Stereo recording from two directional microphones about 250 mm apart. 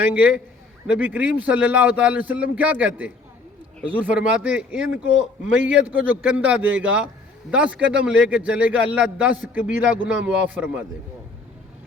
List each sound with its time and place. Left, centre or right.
0.0 s a man's voice: centre
7.8 s speech: right
8.0 s a man's voice: centre